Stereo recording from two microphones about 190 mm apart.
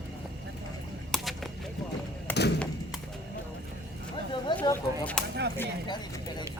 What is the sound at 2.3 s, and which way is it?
Thump, 10° left (ahead or behind).